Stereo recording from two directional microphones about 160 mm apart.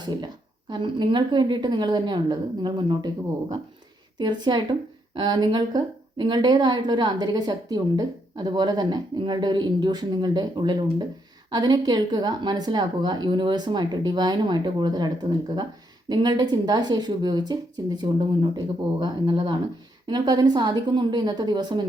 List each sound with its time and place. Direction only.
0.0 s a woman's voice: 25° right (ahead or behind)
4.2 s speech: 30° right (ahead or behind)